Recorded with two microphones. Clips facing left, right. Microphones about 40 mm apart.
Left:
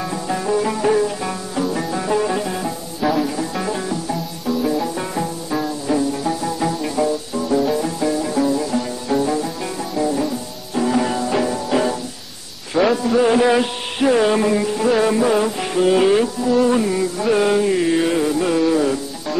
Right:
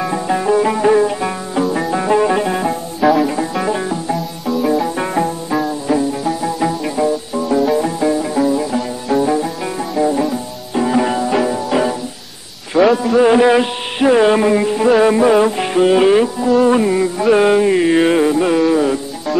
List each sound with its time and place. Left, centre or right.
0.0 s music: right
5.5 s music: centre
12.9 s a sound: centre
13.3 s carnatic music: centre
14.9 s music: centre